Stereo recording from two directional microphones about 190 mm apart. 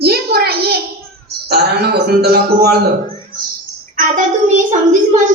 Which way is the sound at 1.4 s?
55° right (ahead or behind).